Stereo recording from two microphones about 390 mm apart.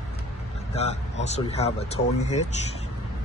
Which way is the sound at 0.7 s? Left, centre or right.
Centre.